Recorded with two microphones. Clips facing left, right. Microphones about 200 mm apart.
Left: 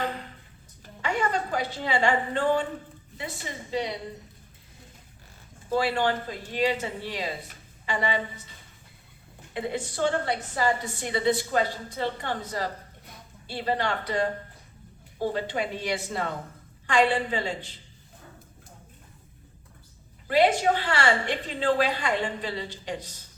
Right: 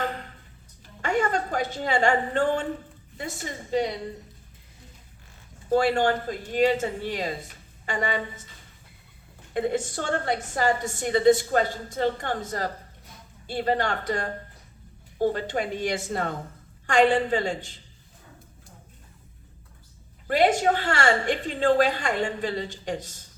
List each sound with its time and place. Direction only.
1.0 s a woman's voice: 45° right (ahead or behind)
5.6 s a woman's voice: 45° right (ahead or behind)
9.5 s a woman's voice: 45° right (ahead or behind)
20.2 s a woman's voice: 45° right (ahead or behind)